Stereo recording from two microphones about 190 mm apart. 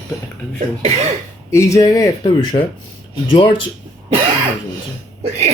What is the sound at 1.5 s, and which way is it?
Speech, 15° left (ahead or behind).